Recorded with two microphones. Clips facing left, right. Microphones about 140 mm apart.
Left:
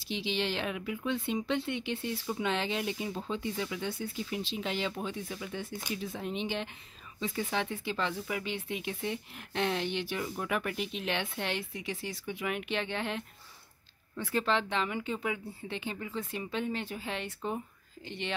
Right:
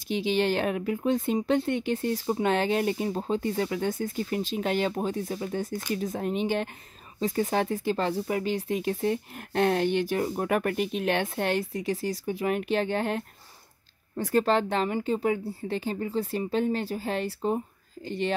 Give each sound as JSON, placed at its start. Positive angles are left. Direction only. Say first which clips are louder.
{"t": 0.1, "sound": "speech", "louder": "right 8 dB", "side_deg": -50}